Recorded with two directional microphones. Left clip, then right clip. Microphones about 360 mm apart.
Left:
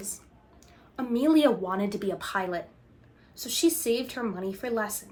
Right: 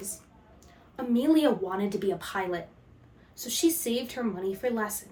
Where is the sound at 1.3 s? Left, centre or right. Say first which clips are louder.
Left 2 dB; centre.